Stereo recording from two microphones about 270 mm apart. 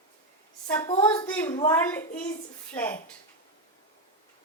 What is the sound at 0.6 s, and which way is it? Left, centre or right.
A woman's voice, centre.